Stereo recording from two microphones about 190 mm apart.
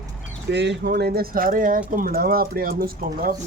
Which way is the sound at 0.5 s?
65° right (ahead or behind).